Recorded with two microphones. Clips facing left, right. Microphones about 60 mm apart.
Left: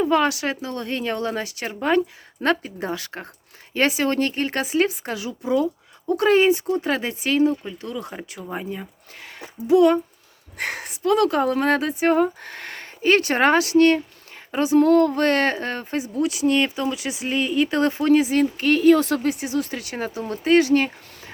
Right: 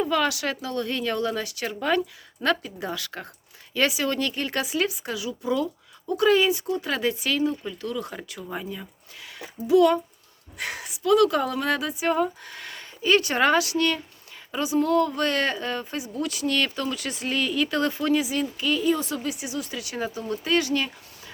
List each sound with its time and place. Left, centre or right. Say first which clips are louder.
0.1 s speech: left 4 dB; left
5.4 s speech: left 5 dB; left
6.1 s speech: left 3 dB; left; by 8.5 s centre
8.5 s speech: left 4 dB; left
10.6 s speech: left 4 dB; left
16.2 s speech: left 6 dB; left
19.3 s speech: left 7 dB; left